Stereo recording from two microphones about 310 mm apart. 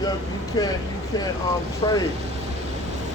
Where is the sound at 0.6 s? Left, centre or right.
Centre.